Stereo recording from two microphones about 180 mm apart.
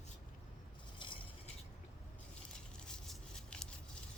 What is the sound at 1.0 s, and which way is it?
Cutlery, 30° left (ahead or behind).